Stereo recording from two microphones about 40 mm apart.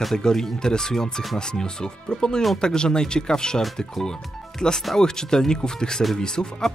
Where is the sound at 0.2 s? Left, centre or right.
Centre.